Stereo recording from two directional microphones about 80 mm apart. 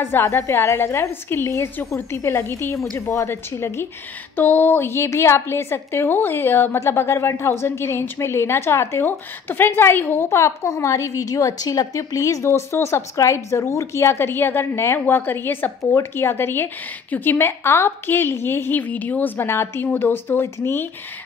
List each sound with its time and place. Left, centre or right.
0.0 s a woman's voice: left